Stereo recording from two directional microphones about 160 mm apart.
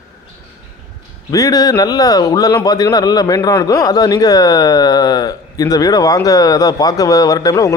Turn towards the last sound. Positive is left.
turn(degrees=20)  # may be behind; listen again after turning